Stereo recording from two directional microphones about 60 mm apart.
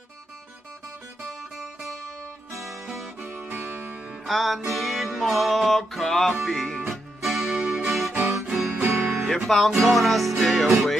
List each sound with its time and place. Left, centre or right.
2.5 s music: centre
3.3 s music: right
4.3 s music: centre
7.4 s music: centre
7.8 s music: centre
8.7 s music: right
9.3 s music: centre